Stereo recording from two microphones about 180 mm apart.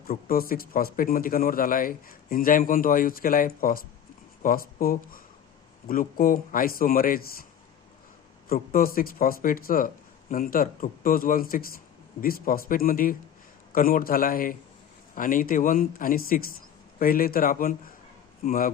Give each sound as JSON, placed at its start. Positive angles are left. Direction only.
{"t": 0.1, "sound": "speech", "side_deg": 55}
{"t": 8.7, "sound": "speech", "side_deg": 55}